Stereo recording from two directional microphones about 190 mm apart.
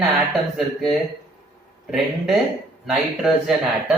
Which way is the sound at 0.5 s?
Centre (ahead or behind).